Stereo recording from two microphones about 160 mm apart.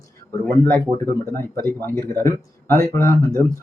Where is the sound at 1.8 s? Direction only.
15° left (ahead or behind).